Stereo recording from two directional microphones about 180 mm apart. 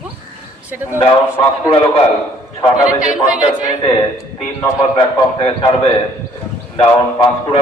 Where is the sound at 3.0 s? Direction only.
5° right (ahead or behind).